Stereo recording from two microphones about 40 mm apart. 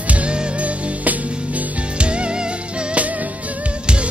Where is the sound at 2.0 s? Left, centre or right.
Right.